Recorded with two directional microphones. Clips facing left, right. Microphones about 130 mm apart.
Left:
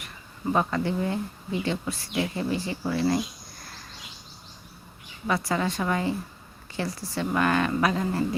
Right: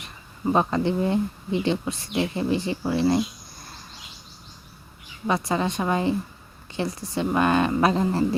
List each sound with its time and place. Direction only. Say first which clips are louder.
0.0 s speech: right 4 dB; 20° right (ahead or behind)
5.2 s speech: right 2 dB; 20° right (ahead or behind)